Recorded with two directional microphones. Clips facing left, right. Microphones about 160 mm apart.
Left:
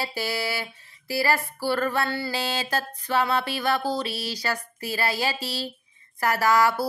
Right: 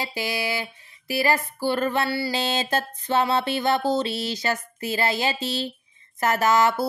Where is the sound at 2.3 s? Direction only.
25° right (ahead or behind).